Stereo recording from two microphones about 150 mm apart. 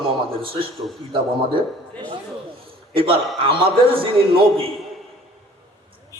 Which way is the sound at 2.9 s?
35° right (ahead or behind).